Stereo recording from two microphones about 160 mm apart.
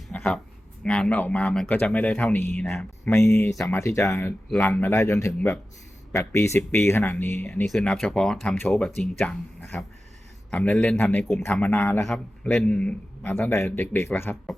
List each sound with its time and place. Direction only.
0.1 s a sound: 5° left (ahead or behind)
0.9 s a man's voice: 5° left (ahead or behind)
3.1 s a man's voice: 20° left (ahead or behind)
7.7 s a man's voice: centre (ahead or behind)